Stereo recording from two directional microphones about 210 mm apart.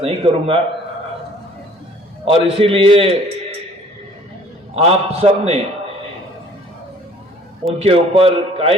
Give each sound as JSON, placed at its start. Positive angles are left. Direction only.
{"t": 0.0, "sound": "a man's voice", "side_deg": -30}
{"t": 2.3, "sound": "a man's voice", "side_deg": -25}
{"t": 4.7, "sound": "a man's voice", "side_deg": -30}
{"t": 7.8, "sound": "a man's voice", "side_deg": -25}